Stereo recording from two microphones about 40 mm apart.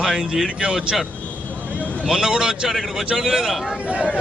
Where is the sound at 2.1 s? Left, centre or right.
Centre.